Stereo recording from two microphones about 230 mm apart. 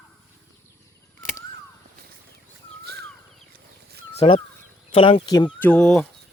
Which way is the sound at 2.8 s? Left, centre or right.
Right.